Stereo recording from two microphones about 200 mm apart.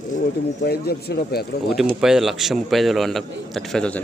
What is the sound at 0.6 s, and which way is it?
Speech, 50° left (ahead or behind).